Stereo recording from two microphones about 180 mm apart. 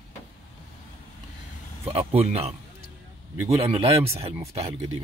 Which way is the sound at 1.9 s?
35° right (ahead or behind).